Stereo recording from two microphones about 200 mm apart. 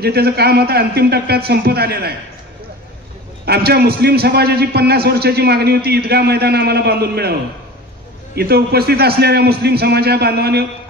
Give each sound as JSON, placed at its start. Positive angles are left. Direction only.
{"t": 0.0, "sound": "a man's voice", "side_deg": -50}
{"t": 3.4, "sound": "a man's voice", "side_deg": -55}
{"t": 8.4, "sound": "a man's voice", "side_deg": -50}